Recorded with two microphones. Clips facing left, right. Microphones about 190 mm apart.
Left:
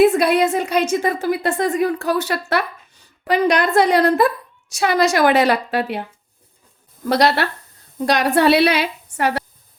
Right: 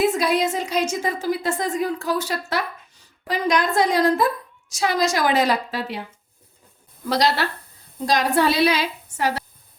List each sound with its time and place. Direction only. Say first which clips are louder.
0.0 s a woman's voice: left 6 dB; 60° left (ahead or behind)
7.1 s a woman's voice: left 4 dB; 60° left (ahead or behind)